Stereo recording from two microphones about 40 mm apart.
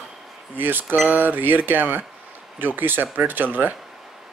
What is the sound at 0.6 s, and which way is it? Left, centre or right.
Speech, right.